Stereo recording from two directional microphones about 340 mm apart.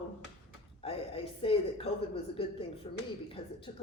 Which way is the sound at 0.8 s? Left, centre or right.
Centre.